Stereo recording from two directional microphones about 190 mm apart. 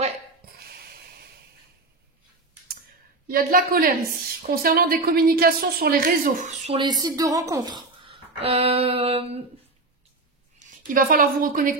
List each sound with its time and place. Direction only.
3.3 s a woman's voice: 50° right (ahead or behind)
6.8 s speech: 20° right (ahead or behind)
10.6 s a woman's voice: 45° right (ahead or behind)